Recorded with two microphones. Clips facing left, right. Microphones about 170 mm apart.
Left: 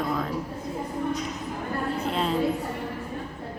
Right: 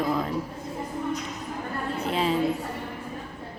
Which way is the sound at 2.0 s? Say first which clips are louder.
Right 4 dB; centre (ahead or behind).